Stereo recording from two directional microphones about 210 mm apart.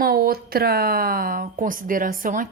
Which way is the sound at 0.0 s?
45° right (ahead or behind).